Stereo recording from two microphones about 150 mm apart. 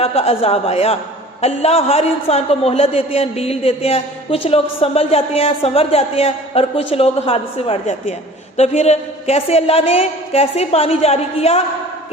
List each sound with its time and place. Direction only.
0.0 s a man's voice: 40° left (ahead or behind)